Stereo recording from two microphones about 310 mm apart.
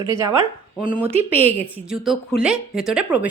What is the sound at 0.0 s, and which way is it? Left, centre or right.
Speech, centre.